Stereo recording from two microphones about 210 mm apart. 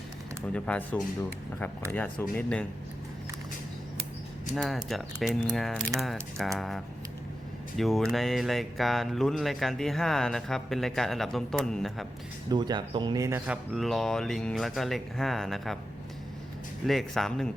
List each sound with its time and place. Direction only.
0.5 s speech: 5° left (ahead or behind)
4.5 s speech: centre (ahead or behind)
12.5 s speech: 20° right (ahead or behind)
13.7 s speech: centre (ahead or behind)
16.8 s speech: centre (ahead or behind)